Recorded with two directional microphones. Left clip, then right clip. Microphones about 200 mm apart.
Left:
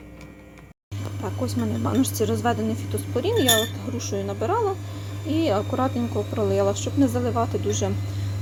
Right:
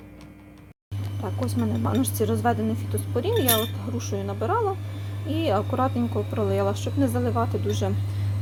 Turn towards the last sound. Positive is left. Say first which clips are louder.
# left 2 dB
turn(degrees=0)  # may be behind; listen again after turning